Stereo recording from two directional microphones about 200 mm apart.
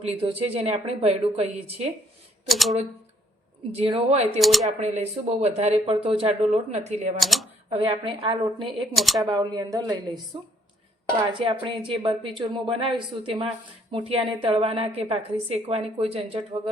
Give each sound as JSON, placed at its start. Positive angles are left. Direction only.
{"t": 0.0, "sound": "a woman's voice", "side_deg": -30}
{"t": 2.5, "sound": "speech", "side_deg": 0}
{"t": 3.7, "sound": "speech", "side_deg": -30}
{"t": 4.4, "sound": "speech", "side_deg": 0}
{"t": 4.8, "sound": "speech", "side_deg": -35}
{"t": 7.2, "sound": "speech", "side_deg": 0}
{"t": 7.7, "sound": "a woman's voice", "side_deg": -30}
{"t": 9.0, "sound": "speech", "side_deg": 0}
{"t": 9.3, "sound": "a woman's voice", "side_deg": -20}